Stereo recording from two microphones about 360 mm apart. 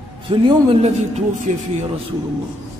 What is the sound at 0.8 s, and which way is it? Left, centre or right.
Speech, centre.